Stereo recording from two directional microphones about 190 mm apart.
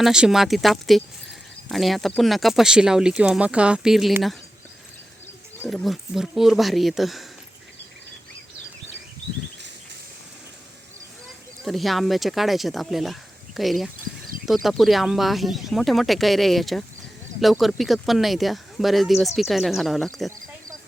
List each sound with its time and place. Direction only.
0.0 s speech: 5° right (ahead or behind)
5.6 s speech: centre (ahead or behind)
11.6 s speech: centre (ahead or behind)